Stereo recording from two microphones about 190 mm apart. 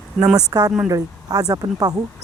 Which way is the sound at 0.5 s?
20° right (ahead or behind).